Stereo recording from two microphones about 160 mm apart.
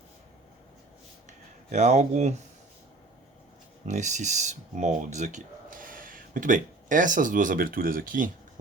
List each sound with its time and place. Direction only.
1.3 s speech: 45° right (ahead or behind)
3.8 s speech: 50° right (ahead or behind)